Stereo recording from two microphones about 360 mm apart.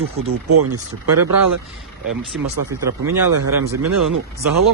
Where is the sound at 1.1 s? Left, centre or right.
Right.